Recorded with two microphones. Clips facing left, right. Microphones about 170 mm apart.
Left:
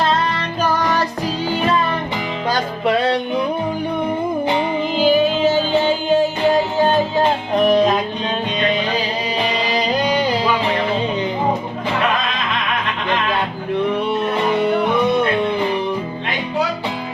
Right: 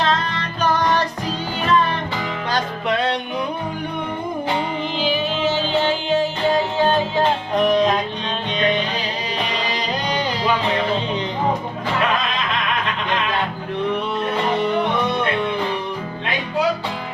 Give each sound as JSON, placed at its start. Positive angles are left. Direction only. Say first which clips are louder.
{"t": 4.9, "sound": "music", "louder": "left 8 dB", "side_deg": 45}
{"t": 7.6, "sound": "music", "louder": "left 3 dB", "side_deg": 5}